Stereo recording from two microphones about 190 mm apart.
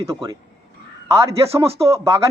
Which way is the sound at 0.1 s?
20° right (ahead or behind).